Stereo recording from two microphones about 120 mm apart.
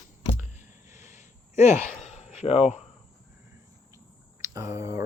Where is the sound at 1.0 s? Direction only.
85° left.